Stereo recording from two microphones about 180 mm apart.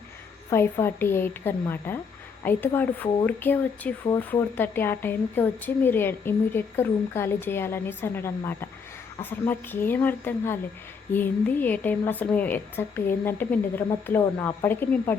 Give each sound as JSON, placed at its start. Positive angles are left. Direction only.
{"t": 0.5, "sound": "a woman's voice", "side_deg": 15}